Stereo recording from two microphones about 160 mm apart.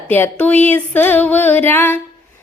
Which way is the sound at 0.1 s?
10° left (ahead or behind).